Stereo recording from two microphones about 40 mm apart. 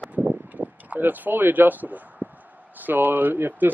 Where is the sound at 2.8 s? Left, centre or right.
Right.